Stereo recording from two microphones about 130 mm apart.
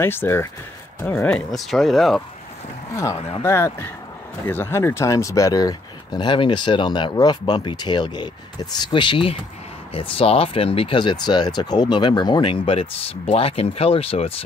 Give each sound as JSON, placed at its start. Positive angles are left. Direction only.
{"t": 0.0, "sound": "speech", "side_deg": 20}
{"t": 3.4, "sound": "speech", "side_deg": 20}